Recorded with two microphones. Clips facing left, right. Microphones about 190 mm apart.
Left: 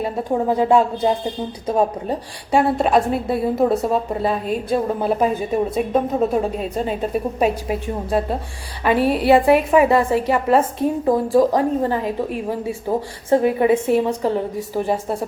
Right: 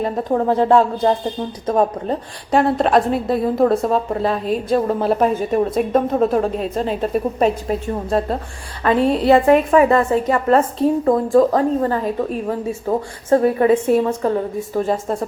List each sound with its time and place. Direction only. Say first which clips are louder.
0.0 s a woman's voice: right 2 dB; 10° left (ahead or behind)